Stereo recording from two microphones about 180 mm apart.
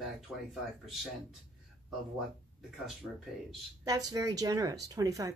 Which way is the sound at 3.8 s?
20° right (ahead or behind).